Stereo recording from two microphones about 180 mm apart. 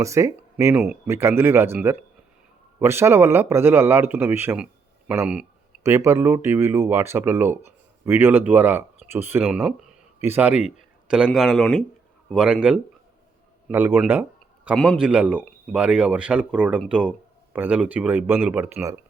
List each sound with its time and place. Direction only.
0.0 s a man's voice: 15° right (ahead or behind)
10.8 s a sound: 5° right (ahead or behind)
11.3 s speech: centre (ahead or behind)
13.7 s a man's voice: 10° right (ahead or behind)
14.1 s a sound: 10° right (ahead or behind)
14.8 s speech: 5° right (ahead or behind)